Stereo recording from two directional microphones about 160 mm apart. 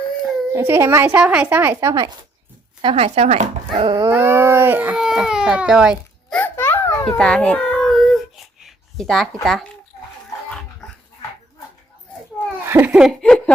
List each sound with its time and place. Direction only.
0.5 s speech: 15° right (ahead or behind)
2.8 s speech: 40° right (ahead or behind)
3.8 s dog: 25° right (ahead or behind)
4.1 s speech: 15° right (ahead or behind)
6.3 s babbling: 10° left (ahead or behind)
7.2 s a sound: 5° left (ahead or behind)
12.6 s laughter: 15° right (ahead or behind); by 13.5 s 5° left (ahead or behind)